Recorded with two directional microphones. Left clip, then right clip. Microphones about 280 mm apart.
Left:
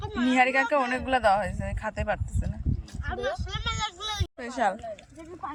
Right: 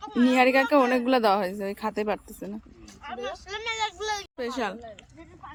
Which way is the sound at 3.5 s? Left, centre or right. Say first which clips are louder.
Right 2 dB; right.